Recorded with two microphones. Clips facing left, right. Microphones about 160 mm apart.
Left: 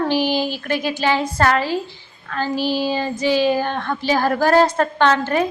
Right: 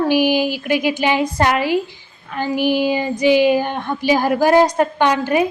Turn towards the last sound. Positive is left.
turn(degrees=-10)  # may be behind; listen again after turning